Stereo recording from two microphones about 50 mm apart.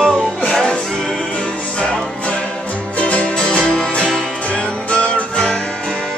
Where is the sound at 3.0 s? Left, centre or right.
Left.